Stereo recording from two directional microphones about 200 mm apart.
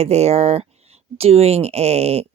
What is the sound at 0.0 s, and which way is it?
Speech, 35° right (ahead or behind).